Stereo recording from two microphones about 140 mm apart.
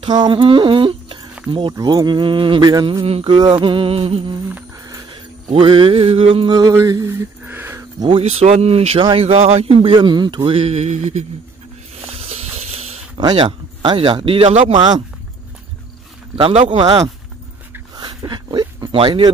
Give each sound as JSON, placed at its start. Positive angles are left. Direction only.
{"t": 0.0, "sound": "speech", "side_deg": -35}
{"t": 4.7, "sound": "music", "side_deg": -25}
{"t": 5.5, "sound": "speech", "side_deg": -40}
{"t": 6.5, "sound": "speech", "side_deg": -25}
{"t": 8.2, "sound": "speech", "side_deg": -50}
{"t": 9.9, "sound": "speech", "side_deg": -30}
{"t": 12.1, "sound": "music", "side_deg": -45}
{"t": 13.2, "sound": "speech", "side_deg": -35}
{"t": 16.3, "sound": "speech", "side_deg": -40}
{"t": 16.7, "sound": "speech", "side_deg": -30}
{"t": 17.9, "sound": "dog", "side_deg": -30}
{"t": 18.9, "sound": "speech", "side_deg": -40}